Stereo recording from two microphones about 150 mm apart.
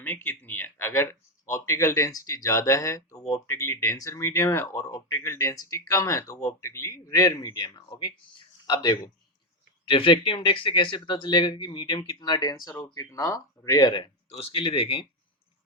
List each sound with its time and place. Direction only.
0.0 s a sound: 10° left (ahead or behind)
1.5 s speech: 20° left (ahead or behind)
12.7 s speech: 15° left (ahead or behind)
14.3 s speech: 40° left (ahead or behind)